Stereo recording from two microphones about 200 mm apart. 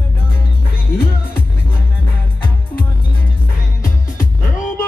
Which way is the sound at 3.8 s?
40° left (ahead or behind).